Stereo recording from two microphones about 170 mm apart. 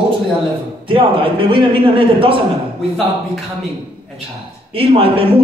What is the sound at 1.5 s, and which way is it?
Speech, 30° right (ahead or behind).